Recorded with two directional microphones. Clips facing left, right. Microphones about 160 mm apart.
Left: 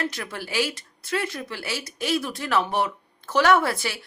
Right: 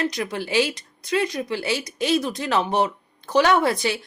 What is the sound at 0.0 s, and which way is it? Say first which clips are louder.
A woman's voice: right 5 dB; 15° right (ahead or behind).